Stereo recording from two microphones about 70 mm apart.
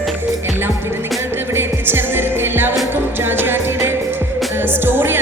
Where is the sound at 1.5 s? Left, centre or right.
Right.